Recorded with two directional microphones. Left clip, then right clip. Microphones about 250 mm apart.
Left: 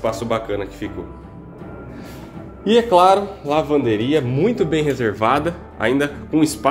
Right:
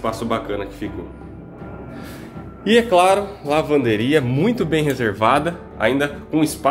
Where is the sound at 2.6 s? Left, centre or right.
Centre.